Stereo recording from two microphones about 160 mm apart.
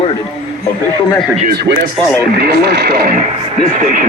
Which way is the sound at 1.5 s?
85° right.